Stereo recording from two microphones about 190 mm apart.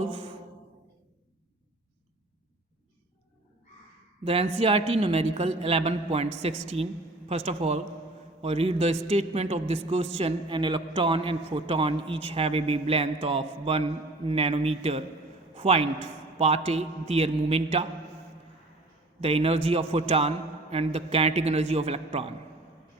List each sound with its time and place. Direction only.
4.2 s a man's voice: 30° right (ahead or behind)
19.2 s a man's voice: 30° right (ahead or behind)